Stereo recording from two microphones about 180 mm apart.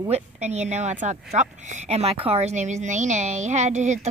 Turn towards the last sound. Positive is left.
turn(degrees=-40)  # may be behind; listen again after turning